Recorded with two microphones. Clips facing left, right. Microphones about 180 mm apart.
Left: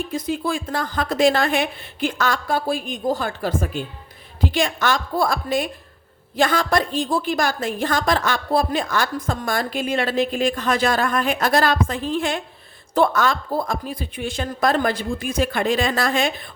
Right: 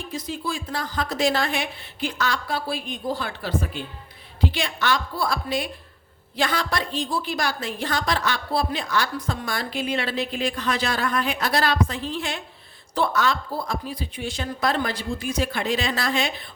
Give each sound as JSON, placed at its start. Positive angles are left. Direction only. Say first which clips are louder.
{"t": 0.1, "sound": "a woman's voice", "louder": "left 2 dB", "side_deg": 55}